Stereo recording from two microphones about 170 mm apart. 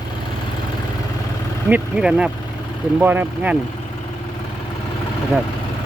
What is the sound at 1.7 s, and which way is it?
Speech, 5° right (ahead or behind).